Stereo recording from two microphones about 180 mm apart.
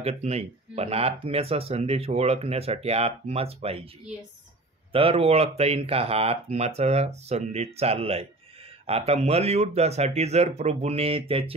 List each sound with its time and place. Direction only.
0.0 s speech: 35° right (ahead or behind)
4.9 s speech: 30° right (ahead or behind)